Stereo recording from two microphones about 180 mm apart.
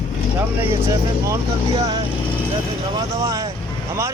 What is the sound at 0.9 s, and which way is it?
Speech, 15° right (ahead or behind).